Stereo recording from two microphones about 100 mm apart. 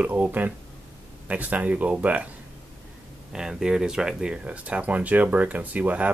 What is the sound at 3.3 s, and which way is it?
Speech, 5° right (ahead or behind).